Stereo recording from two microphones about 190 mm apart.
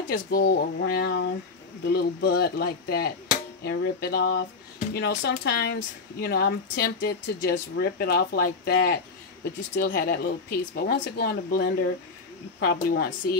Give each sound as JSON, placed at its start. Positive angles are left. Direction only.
{"t": 0.1, "sound": "speech", "side_deg": 50}